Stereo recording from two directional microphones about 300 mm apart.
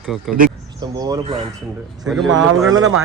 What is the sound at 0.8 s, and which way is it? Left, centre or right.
Speech, centre.